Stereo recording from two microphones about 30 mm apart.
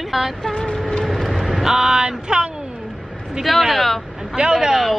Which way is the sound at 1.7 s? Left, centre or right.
Right.